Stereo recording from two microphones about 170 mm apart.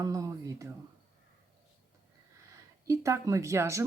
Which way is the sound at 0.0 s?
20° right (ahead or behind).